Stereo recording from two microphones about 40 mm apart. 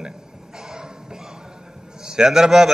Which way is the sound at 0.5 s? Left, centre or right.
Centre.